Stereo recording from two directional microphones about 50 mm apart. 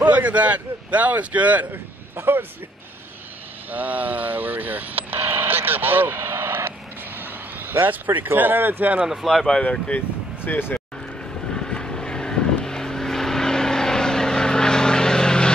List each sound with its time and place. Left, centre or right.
0.0 s a man's voice: right
1.7 s a man's voice: right
3.7 s speech: right
7.2 s vehicle: right
7.8 s speech: right
9.0 s speech: centre
9.5 s speech: left
9.9 s speech: left
11.5 s vehicle: centre